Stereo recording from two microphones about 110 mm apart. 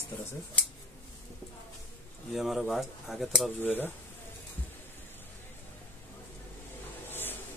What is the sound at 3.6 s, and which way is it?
Speech, 20° left (ahead or behind).